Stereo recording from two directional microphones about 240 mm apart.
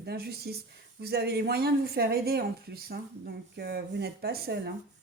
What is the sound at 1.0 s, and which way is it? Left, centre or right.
Speech, right.